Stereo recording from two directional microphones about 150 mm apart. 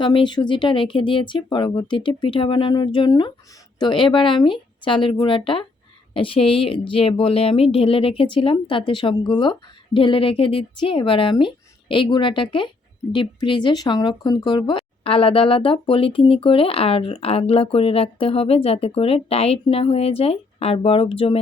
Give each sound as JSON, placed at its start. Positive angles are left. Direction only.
{"t": 0.0, "sound": "speech", "side_deg": 30}